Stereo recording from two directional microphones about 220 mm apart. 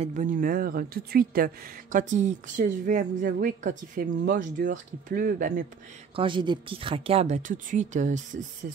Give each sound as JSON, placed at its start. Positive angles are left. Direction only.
{"t": 0.0, "sound": "speech", "side_deg": -35}
{"t": 6.1, "sound": "speech", "side_deg": -20}